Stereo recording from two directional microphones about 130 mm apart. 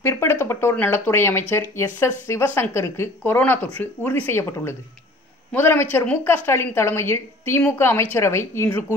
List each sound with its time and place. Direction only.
0.0 s speech: 20° left (ahead or behind)